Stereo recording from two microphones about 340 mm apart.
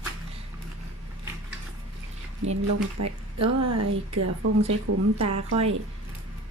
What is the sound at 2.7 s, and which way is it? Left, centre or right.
Speech, right.